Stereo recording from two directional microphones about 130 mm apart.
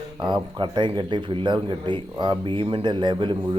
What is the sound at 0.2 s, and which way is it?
Speech, 35° right (ahead or behind).